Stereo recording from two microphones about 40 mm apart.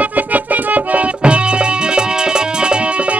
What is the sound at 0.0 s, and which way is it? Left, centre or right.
Music, right.